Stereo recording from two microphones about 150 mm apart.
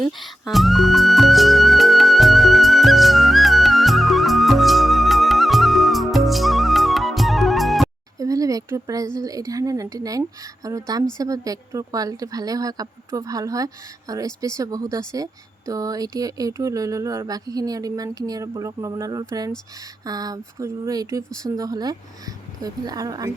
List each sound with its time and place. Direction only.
0.0 s music: centre (ahead or behind)
8.2 s a sound: 20° right (ahead or behind)
9.1 s a woman's voice: 20° right (ahead or behind)